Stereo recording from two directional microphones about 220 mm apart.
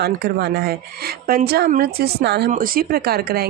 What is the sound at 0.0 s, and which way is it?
Speech, 45° right (ahead or behind).